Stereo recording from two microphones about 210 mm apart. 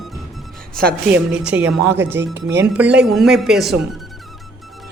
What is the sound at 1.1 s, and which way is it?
A woman's voice, 5° right (ahead or behind).